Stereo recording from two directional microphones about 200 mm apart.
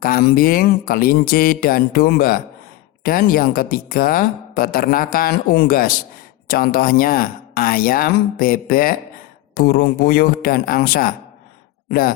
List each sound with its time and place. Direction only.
0.0 s a woman's voice: 45° left (ahead or behind)